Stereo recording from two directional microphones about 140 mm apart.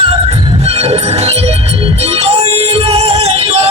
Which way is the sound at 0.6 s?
45° right (ahead or behind).